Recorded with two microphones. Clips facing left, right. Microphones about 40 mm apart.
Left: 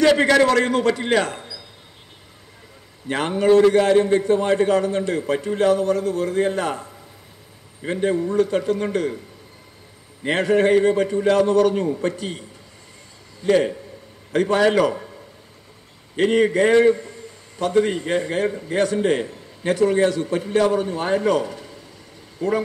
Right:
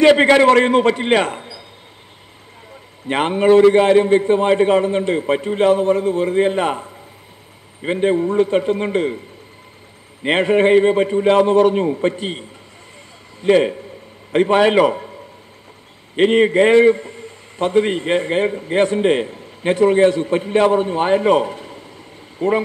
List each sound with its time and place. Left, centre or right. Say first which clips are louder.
0.0 s a man's voice: right 4 dB; right
3.1 s a man's voice: right 3 dB; right
10.2 s a man's voice: right 3 dB; right
16.2 s a man's voice: right 4 dB; right